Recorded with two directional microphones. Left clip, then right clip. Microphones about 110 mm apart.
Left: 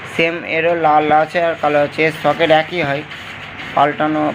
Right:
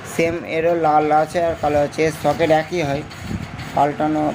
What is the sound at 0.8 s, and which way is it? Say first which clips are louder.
Speech: left 4 dB; 35° right (ahead or behind).